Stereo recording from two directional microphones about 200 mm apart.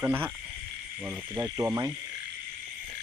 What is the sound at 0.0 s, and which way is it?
Speech, 10° right (ahead or behind).